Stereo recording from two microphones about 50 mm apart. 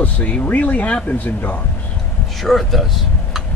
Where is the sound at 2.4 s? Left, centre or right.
Centre.